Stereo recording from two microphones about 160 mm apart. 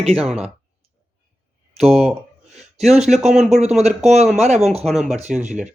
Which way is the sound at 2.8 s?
45° right (ahead or behind).